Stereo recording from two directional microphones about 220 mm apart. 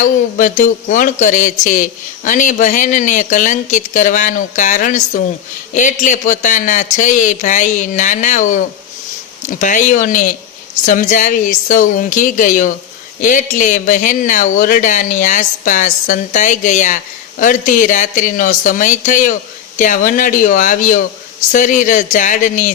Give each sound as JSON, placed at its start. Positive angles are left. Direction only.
{"t": 0.0, "sound": "speech", "side_deg": 35}